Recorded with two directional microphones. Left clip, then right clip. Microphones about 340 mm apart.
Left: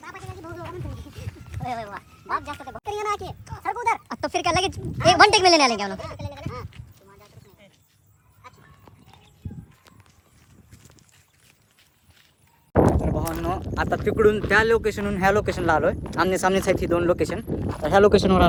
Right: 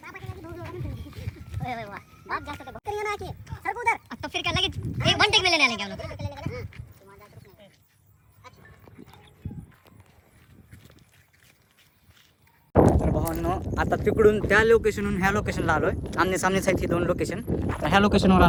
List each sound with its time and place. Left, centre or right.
0.0 s a sound: centre
8.4 s goat: centre
12.8 s speech: centre
17.8 s speech: centre